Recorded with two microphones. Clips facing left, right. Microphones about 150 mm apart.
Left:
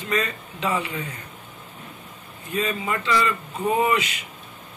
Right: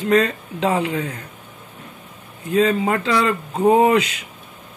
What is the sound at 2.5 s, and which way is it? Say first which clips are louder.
Speech: right 9 dB; 90° right.